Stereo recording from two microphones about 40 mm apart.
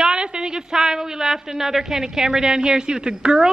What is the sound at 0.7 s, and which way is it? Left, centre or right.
A woman's voice, centre.